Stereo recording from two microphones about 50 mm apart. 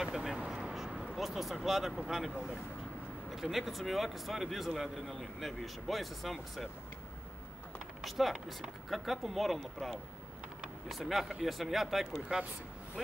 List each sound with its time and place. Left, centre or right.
0.0 s vehicle: centre
0.4 s a sound: centre
1.1 s speech: centre
8.0 s speech: centre